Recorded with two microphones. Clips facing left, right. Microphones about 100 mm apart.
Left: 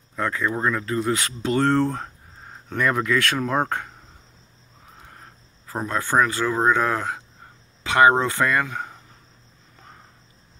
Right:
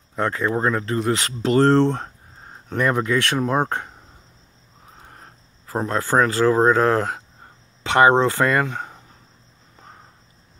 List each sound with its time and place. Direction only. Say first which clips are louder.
0.1 s speech: right 3 dB; 30° right (ahead or behind)
5.7 s speech: right 3 dB; 30° right (ahead or behind)